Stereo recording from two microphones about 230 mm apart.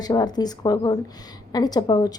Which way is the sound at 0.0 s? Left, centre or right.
Centre.